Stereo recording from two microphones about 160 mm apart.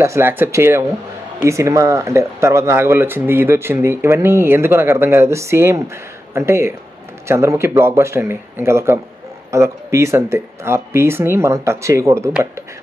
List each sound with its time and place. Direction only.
0.0 s speech: 15° right (ahead or behind)